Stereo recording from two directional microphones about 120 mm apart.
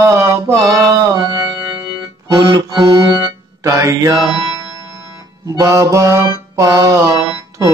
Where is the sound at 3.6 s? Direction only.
25° right (ahead or behind).